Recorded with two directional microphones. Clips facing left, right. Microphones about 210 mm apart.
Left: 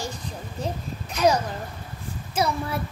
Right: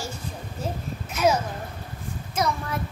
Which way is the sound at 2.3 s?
30° left (ahead or behind).